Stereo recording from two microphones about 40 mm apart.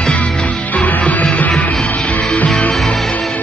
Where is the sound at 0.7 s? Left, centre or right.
Left.